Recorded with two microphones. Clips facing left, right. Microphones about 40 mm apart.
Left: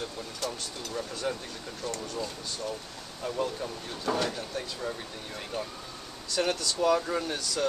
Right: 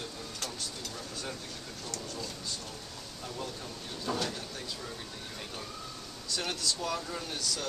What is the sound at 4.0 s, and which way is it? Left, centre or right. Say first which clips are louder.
Speech: left 5 dB; left.